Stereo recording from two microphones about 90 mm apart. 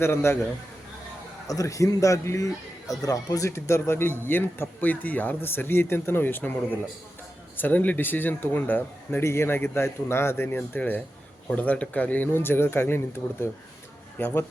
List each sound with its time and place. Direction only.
0.0 s speech: 30° left (ahead or behind)
1.5 s a man's voice: 40° left (ahead or behind)